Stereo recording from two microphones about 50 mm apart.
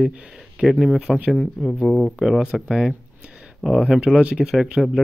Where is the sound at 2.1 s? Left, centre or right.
Centre.